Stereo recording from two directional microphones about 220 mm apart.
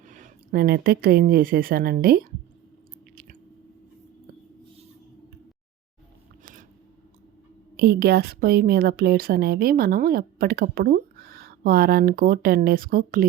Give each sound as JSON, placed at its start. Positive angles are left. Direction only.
{"t": 0.1, "sound": "speech", "side_deg": -40}
{"t": 6.4, "sound": "a sound", "side_deg": -35}
{"t": 7.8, "sound": "a woman's voice", "side_deg": -45}